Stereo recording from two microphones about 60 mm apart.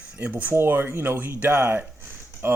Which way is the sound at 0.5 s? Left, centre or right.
Right.